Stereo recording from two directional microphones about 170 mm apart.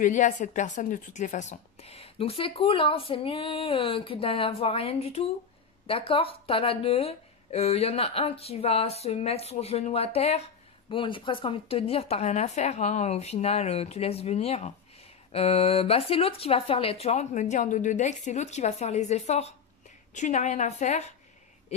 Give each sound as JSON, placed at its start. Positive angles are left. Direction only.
{"t": 0.0, "sound": "a woman's voice", "side_deg": 50}